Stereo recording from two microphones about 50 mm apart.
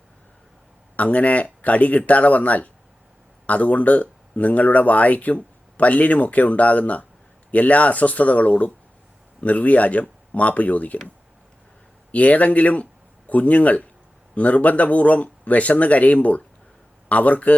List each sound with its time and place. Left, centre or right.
0.9 s speech: left
12.1 s speech: left